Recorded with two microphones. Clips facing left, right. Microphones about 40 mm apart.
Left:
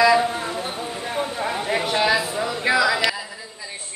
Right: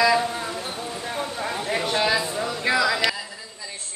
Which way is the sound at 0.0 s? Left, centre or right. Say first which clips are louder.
Left 3 dB; centre.